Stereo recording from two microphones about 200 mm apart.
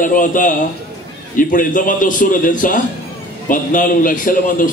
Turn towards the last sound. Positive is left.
turn(degrees=40)  # may be behind; listen again after turning